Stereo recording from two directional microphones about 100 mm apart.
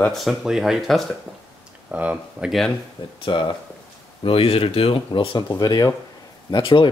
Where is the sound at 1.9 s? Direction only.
15° right (ahead or behind).